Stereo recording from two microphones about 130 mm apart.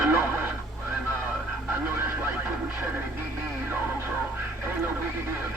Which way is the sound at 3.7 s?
15° right (ahead or behind).